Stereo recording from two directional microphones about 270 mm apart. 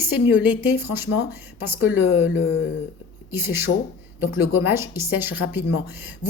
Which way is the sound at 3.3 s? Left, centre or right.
Centre.